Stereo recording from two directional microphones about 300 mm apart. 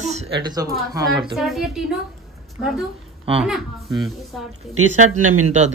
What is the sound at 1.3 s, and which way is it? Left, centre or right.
A woman's voice, centre.